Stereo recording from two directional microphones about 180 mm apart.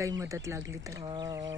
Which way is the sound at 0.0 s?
15° right (ahead or behind).